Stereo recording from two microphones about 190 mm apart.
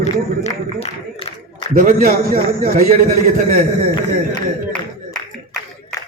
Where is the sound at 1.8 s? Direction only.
45° right (ahead or behind).